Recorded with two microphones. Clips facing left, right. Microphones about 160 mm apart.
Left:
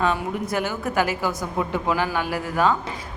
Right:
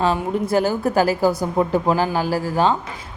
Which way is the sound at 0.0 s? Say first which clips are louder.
Right 4 dB; 30° right (ahead or behind).